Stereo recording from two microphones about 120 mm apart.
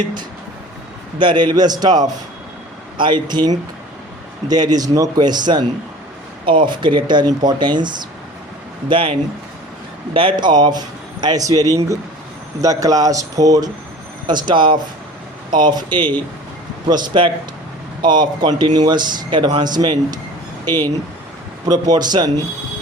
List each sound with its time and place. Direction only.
1.2 s speech: 40° right (ahead or behind)
10.2 s speech: 40° right (ahead or behind)
12.6 s speech: 30° right (ahead or behind)
20.7 s speech: 15° left (ahead or behind)
21.7 s speech: 35° right (ahead or behind)